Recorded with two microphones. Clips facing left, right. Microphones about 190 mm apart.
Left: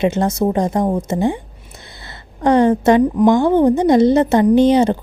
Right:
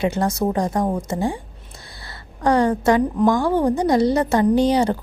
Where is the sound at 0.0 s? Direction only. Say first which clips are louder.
Left 4 dB; 25° left (ahead or behind).